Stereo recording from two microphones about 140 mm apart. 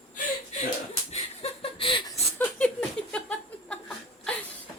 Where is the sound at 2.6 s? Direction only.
10° left (ahead or behind).